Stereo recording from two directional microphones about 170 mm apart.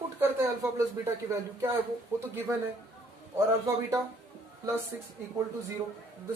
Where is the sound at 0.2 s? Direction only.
15° right (ahead or behind).